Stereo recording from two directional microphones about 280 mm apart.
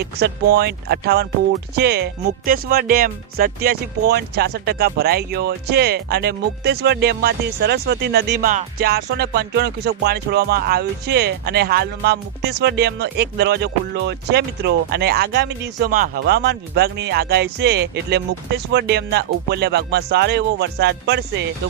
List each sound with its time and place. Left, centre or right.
0.2 s speech: right